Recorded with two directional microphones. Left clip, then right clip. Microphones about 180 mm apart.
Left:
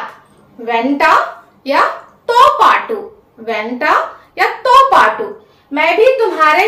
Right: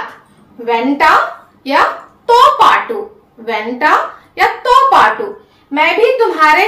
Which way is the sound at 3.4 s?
20° left (ahead or behind).